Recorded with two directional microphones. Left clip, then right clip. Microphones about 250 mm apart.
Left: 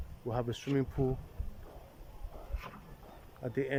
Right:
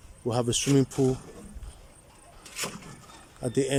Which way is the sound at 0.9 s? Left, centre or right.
Right.